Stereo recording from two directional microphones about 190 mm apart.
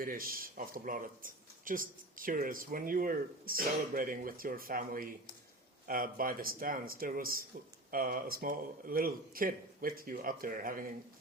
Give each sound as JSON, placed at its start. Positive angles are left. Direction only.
{"t": 0.0, "sound": "speech", "side_deg": -50}